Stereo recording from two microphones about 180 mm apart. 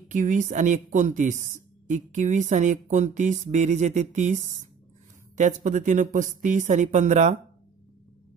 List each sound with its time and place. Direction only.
0.1 s speech: 45° right (ahead or behind)